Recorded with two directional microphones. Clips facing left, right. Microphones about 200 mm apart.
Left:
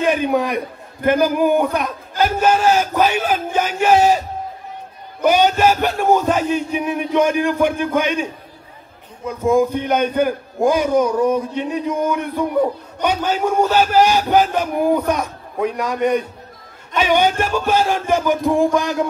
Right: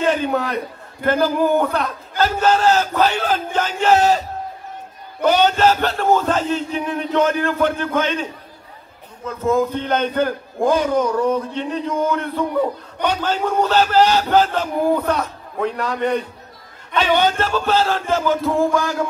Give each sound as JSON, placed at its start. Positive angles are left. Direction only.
{"t": 0.0, "sound": "a man's voice", "side_deg": 15}
{"t": 5.2, "sound": "a man's voice", "side_deg": 10}